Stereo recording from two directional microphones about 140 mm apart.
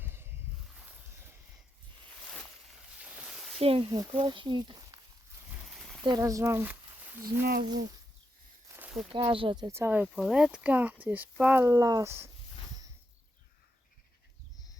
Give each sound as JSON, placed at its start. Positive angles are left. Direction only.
{"t": 0.0, "sound": "a sound", "side_deg": -15}
{"t": 0.7, "sound": "boat", "side_deg": -5}
{"t": 3.0, "sound": "a sound", "side_deg": -5}
{"t": 3.6, "sound": "speech", "side_deg": -45}
{"t": 3.8, "sound": "speech", "side_deg": -30}
{"t": 5.6, "sound": "a sound", "side_deg": 0}
{"t": 6.1, "sound": "speech", "side_deg": -25}
{"t": 7.6, "sound": "speech", "side_deg": -30}
{"t": 8.7, "sound": "a sound", "side_deg": -15}
{"t": 9.1, "sound": "speech", "side_deg": -35}
{"t": 9.7, "sound": "speech", "side_deg": -15}
{"t": 10.2, "sound": "speech", "side_deg": 0}
{"t": 11.6, "sound": "speech", "side_deg": -25}